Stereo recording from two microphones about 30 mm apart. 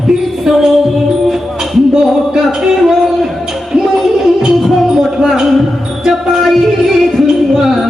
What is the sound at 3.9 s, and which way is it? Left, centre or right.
Music, centre.